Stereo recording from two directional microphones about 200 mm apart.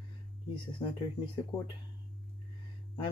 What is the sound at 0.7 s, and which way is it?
Speech, 25° left (ahead or behind).